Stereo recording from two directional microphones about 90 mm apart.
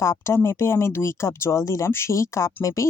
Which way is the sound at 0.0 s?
30° left (ahead or behind).